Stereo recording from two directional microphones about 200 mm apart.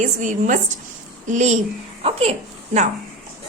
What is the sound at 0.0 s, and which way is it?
A woman's voice, 40° right (ahead or behind).